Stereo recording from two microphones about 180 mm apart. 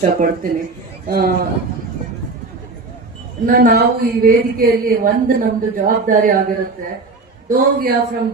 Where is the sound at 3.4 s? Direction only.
50° right (ahead or behind).